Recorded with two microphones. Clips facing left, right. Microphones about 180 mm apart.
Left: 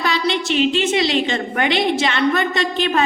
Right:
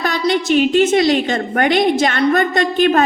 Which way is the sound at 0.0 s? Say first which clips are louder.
Right 3 dB; 45° right (ahead or behind).